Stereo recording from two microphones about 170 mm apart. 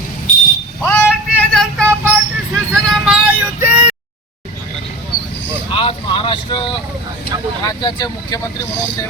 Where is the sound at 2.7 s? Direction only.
Centre (ahead or behind).